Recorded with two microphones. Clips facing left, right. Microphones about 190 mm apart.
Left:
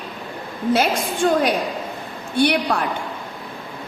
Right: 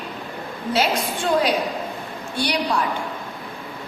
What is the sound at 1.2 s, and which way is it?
A woman's voice, 55° left (ahead or behind).